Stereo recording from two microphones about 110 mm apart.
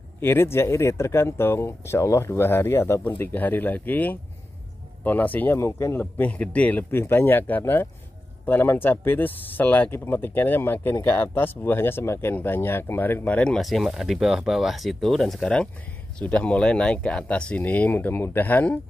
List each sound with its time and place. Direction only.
0.2 s speech: 20° left (ahead or behind)